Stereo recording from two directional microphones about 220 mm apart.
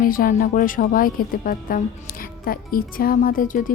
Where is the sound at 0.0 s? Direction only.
40° left (ahead or behind).